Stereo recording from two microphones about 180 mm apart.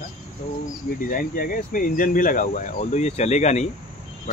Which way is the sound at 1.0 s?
50° left (ahead or behind).